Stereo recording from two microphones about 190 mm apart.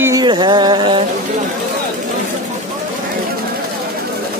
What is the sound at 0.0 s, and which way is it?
Music, 20° right (ahead or behind).